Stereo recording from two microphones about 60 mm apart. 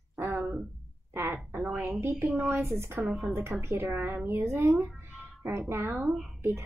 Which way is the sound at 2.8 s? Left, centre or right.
Right.